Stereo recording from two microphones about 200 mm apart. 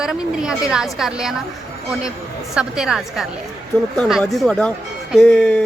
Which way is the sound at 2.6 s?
5° right (ahead or behind).